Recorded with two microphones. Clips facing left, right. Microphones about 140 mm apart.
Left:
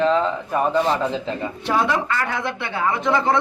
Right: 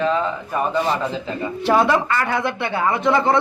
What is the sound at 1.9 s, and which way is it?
Speech, 60° right (ahead or behind).